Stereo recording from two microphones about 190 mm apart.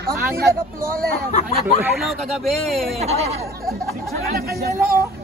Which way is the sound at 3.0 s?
35° right (ahead or behind).